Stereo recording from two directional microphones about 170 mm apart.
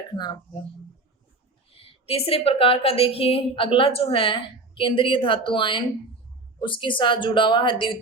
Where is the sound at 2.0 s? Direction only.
35° left (ahead or behind).